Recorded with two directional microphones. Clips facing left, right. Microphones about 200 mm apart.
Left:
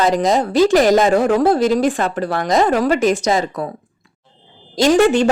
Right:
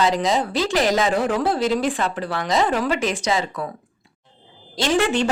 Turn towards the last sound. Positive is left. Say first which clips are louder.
# left 7 dB
turn(degrees=45)  # may be behind; listen again after turning